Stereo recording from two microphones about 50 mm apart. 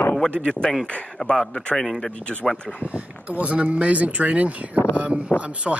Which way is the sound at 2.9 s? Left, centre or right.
Right.